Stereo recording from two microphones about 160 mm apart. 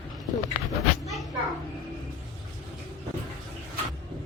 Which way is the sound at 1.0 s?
Centre (ahead or behind).